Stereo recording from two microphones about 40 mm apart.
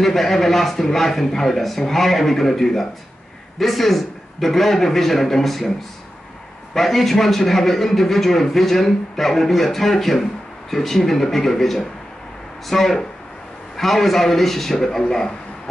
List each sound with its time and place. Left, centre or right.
0.0 s a man's voice: centre
6.7 s a man's voice: centre